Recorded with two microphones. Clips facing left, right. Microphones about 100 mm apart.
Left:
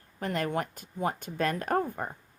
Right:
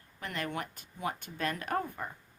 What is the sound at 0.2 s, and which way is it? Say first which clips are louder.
Speech: left 7 dB; 40° left (ahead or behind).